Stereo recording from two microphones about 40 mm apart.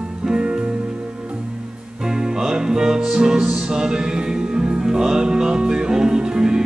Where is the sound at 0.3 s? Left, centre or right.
Right.